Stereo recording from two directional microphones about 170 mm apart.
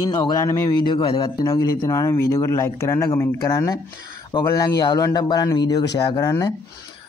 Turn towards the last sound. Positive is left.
turn(degrees=20)  # may be behind; listen again after turning